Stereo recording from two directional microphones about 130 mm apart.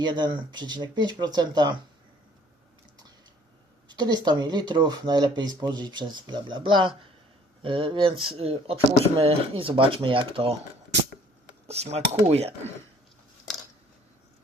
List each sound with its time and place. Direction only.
0.0 s speech: 35° right (ahead or behind)
3.8 s speech: 35° right (ahead or behind)
11.7 s speech: 55° right (ahead or behind)